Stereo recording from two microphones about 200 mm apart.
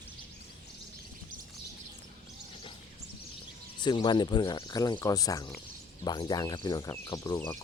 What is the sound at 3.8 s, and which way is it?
Speech, 20° left (ahead or behind).